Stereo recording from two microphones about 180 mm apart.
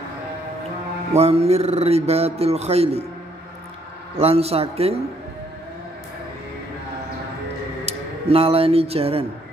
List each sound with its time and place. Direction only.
1.1 s a man's voice: 35° right (ahead or behind)
4.2 s a man's voice: 35° right (ahead or behind)
7.8 s speech: 35° right (ahead or behind)